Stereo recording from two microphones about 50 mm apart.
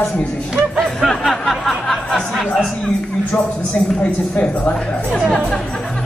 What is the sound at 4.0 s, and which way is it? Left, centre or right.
Speech, left.